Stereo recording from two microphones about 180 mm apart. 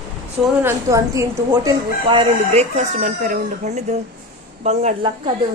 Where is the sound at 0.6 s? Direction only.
15° right (ahead or behind); by 5.1 s 35° right (ahead or behind).